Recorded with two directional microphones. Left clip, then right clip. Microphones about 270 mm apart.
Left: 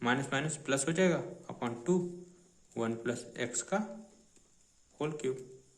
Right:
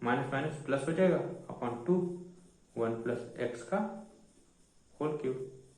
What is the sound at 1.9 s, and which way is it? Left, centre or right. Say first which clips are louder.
Speech: right 1 dB; left.